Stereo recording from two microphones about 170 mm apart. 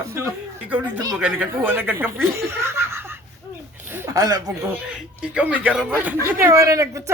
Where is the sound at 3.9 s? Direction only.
15° right (ahead or behind).